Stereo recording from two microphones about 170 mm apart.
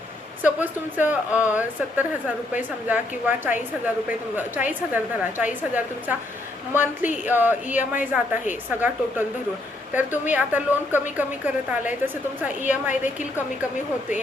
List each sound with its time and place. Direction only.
0.4 s a woman's voice: 10° right (ahead or behind)
7.3 s a woman's voice: 10° right (ahead or behind)
12.6 s a woman's voice: 50° left (ahead or behind)